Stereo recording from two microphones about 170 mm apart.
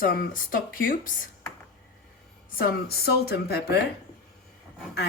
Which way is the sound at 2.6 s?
70° left (ahead or behind).